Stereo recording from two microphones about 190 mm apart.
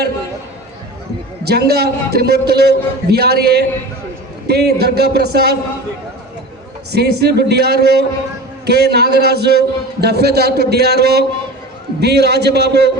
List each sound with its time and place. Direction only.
1.5 s a man's voice: 60° right (ahead or behind)
6.9 s a man's voice: 60° right (ahead or behind)